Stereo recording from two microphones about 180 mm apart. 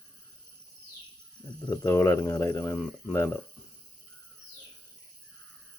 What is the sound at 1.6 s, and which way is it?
Speech, 20° left (ahead or behind).